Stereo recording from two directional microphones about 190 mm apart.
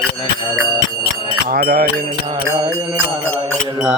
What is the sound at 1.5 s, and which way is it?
Music, 55° right (ahead or behind).